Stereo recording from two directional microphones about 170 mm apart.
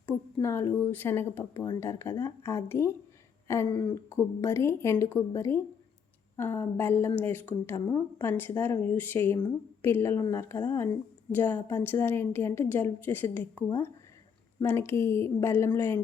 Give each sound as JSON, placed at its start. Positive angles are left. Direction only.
{"t": 0.4, "sound": "a woman's voice", "side_deg": 15}
{"t": 3.7, "sound": "speech", "side_deg": 25}
{"t": 4.1, "sound": "a woman's voice", "side_deg": 15}